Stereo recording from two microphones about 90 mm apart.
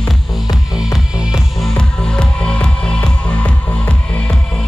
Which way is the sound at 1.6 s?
5° left (ahead or behind).